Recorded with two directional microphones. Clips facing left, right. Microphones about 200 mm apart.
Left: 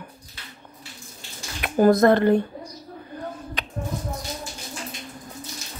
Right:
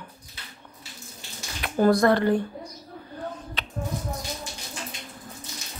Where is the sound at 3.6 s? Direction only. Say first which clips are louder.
Left 2 dB; 15° left (ahead or behind).